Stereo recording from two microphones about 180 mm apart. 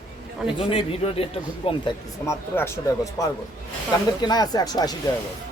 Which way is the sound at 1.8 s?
15° left (ahead or behind).